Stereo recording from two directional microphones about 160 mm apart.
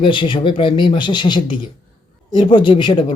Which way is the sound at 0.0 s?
30° left (ahead or behind).